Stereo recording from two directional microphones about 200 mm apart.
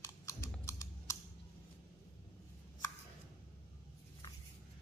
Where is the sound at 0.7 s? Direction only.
15° left (ahead or behind).